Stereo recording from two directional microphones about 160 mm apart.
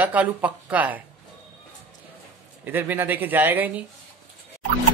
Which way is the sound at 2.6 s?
10° right (ahead or behind).